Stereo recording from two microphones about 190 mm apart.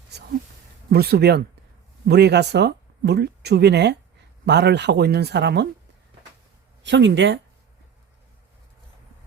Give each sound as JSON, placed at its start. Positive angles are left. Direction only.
{"t": 0.1, "sound": "a sound", "side_deg": -60}
{"t": 0.9, "sound": "speech", "side_deg": -55}
{"t": 6.8, "sound": "speech", "side_deg": -70}